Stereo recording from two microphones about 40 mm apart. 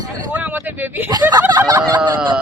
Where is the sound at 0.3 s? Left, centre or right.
Right.